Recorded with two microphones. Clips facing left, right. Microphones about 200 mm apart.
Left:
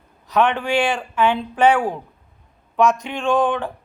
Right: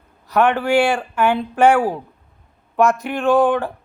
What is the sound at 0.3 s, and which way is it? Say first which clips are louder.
Speech: right 2 dB; 10° right (ahead or behind).